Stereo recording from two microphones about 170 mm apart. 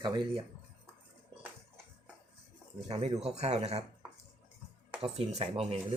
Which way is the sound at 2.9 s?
35° right (ahead or behind).